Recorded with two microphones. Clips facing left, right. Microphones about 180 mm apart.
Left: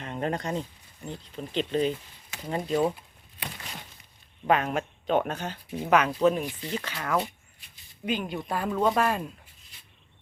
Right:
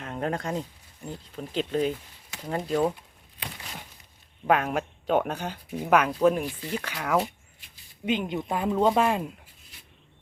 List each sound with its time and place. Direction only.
0.0 s speech: centre (ahead or behind)
4.4 s speech: 5° right (ahead or behind)
8.0 s speech: 20° right (ahead or behind)